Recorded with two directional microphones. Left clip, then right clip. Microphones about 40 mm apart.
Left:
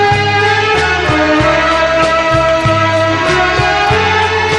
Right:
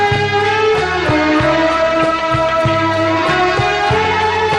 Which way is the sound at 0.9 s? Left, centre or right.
Centre.